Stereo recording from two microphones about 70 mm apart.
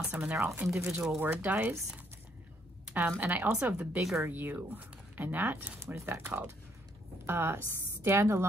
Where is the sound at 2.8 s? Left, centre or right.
Right.